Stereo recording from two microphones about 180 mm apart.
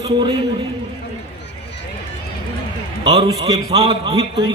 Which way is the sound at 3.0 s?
20° right (ahead or behind).